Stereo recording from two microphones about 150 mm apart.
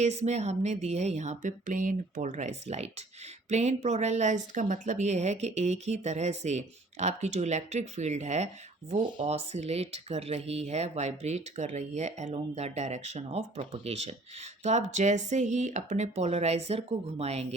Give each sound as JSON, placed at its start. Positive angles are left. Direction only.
{"t": 0.0, "sound": "speech", "side_deg": -50}